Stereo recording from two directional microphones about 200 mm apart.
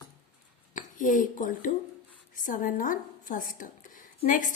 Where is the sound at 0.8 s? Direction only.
40° left (ahead or behind).